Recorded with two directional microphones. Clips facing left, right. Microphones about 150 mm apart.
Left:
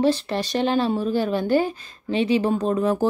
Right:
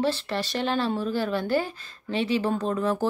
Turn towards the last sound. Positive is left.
turn(degrees=15)  # may be behind; listen again after turning